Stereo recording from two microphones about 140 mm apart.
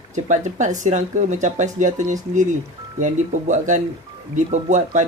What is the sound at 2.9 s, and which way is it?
Speech, 60° right (ahead or behind).